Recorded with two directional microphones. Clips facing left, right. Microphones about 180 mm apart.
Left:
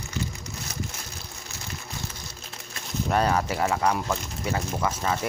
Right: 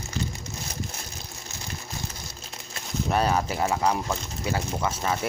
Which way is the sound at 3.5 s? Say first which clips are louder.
Even; 25° right (ahead or behind).